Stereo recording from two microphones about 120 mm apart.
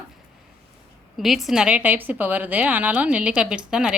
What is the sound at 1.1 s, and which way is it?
A woman's voice, centre (ahead or behind).